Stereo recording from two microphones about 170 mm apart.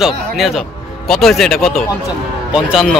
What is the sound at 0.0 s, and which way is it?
Speech, centre (ahead or behind).